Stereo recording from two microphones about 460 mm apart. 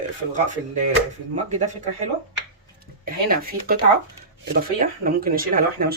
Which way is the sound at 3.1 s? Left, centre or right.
Centre.